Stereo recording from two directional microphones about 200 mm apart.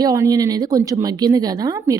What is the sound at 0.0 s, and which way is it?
Speech, 15° right (ahead or behind).